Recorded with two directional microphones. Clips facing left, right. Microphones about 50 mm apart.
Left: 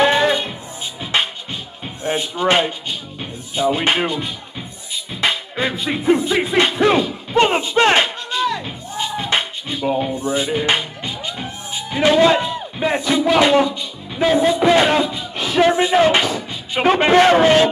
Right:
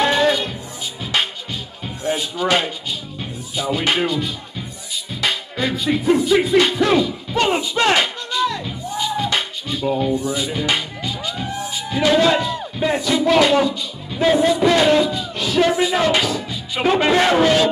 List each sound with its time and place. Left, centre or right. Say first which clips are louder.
0.0 s music: left 1 dB; left
2.0 s speech: left 2 dB; left
5.2 s music: left 2 dB; left
13.4 s speech: left 2 dB; left
14.2 s a man's voice: even; centre
14.6 s a man's voice: even; left